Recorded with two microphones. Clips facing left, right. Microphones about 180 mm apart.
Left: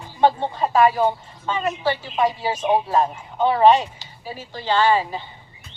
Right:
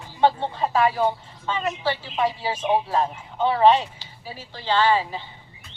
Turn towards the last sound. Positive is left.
turn(degrees=50)  # may be behind; listen again after turning